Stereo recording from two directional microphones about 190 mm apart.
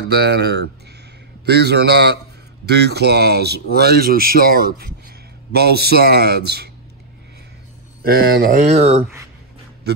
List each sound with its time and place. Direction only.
0.1 s speech: 60° right (ahead or behind)
8.0 s speech: 55° right (ahead or behind); by 9.0 s 35° right (ahead or behind)
9.9 s speech: 60° right (ahead or behind)